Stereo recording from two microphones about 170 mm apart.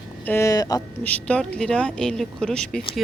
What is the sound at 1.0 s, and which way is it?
A woman's voice, 10° left (ahead or behind).